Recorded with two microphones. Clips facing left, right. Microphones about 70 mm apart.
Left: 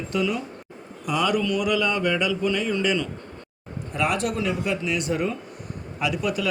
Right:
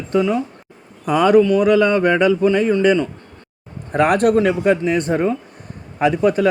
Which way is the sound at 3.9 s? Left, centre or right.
Right.